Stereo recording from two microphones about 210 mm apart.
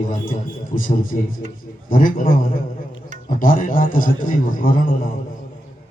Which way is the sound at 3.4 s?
40° left (ahead or behind).